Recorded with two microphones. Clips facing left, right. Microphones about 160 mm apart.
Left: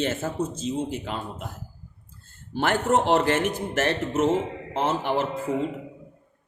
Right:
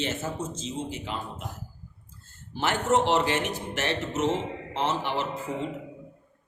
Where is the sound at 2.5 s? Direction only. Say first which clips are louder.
Left 2 dB; 55° left (ahead or behind).